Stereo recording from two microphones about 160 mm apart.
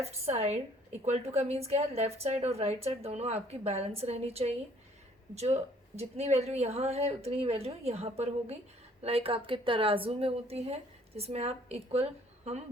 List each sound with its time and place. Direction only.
0.0 s a woman's voice: 40° right (ahead or behind)